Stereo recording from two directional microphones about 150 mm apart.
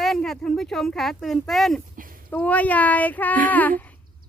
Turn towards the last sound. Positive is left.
turn(degrees=10)  # may be behind; listen again after turning